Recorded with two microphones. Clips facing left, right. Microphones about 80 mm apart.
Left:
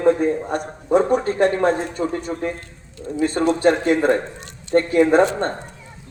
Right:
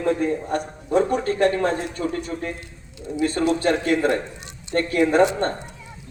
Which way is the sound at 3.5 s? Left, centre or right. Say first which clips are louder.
Left 6 dB; left.